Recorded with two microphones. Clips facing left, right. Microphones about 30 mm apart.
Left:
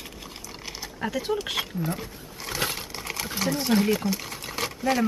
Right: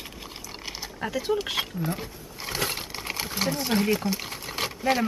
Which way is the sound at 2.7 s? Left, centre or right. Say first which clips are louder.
Right 1 dB; centre.